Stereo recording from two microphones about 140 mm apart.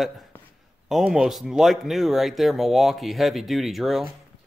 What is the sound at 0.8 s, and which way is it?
Speech, 5° right (ahead or behind).